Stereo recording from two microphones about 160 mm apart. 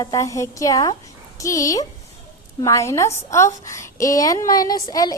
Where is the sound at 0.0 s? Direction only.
20° left (ahead or behind).